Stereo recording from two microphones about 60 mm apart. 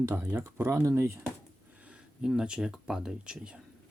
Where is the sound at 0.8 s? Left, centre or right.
Right.